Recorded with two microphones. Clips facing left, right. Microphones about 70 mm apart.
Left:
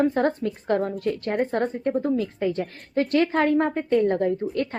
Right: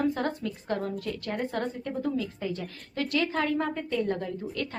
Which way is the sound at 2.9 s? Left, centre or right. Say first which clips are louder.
Left 7 dB; left.